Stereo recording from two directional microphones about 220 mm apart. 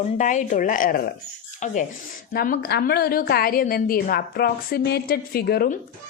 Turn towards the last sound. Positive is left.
turn(degrees=45)  # may be behind; listen again after turning